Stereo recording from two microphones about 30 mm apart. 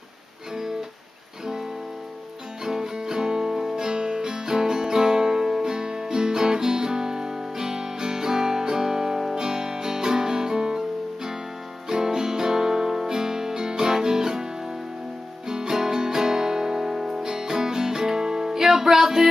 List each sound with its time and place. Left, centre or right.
2.6 s music: centre
11.9 s music: centre